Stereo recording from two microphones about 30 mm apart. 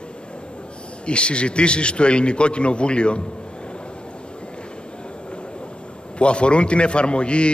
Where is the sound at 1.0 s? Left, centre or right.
Left.